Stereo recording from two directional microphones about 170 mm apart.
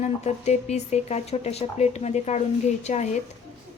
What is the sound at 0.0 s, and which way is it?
A woman's voice, 40° left (ahead or behind).